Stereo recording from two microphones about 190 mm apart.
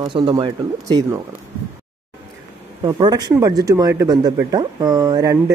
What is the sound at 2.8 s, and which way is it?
Speech, 25° right (ahead or behind).